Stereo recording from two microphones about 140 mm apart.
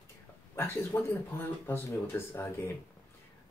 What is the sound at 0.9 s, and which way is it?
Speech, 15° left (ahead or behind).